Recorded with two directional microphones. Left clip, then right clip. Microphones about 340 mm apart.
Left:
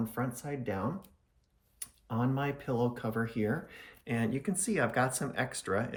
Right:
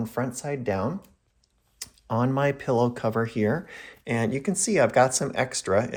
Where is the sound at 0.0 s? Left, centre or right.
Centre.